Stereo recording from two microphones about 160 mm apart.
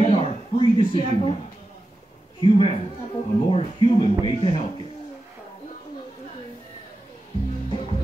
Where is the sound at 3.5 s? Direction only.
35° left (ahead or behind).